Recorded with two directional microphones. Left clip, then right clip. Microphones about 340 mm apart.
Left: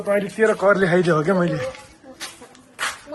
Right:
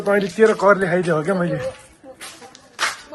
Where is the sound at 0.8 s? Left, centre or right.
Centre.